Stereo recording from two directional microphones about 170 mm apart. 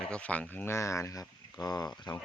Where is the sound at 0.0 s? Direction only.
5° left (ahead or behind).